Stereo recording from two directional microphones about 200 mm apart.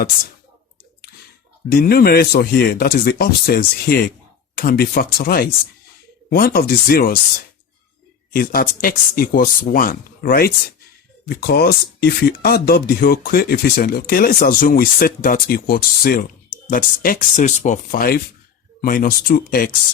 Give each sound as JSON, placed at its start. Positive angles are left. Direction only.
{"t": 1.7, "sound": "speech", "side_deg": 50}
{"t": 8.3, "sound": "speech", "side_deg": 45}